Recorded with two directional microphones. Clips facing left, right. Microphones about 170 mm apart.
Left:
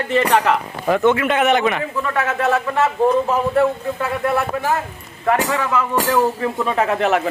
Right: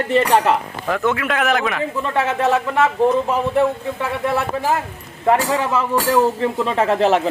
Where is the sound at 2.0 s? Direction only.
25° right (ahead or behind).